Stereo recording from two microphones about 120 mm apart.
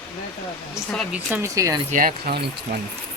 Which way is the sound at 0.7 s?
Centre (ahead or behind).